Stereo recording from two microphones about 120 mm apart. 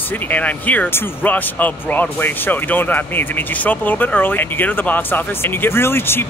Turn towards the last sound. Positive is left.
turn(degrees=20)  # may be behind; listen again after turning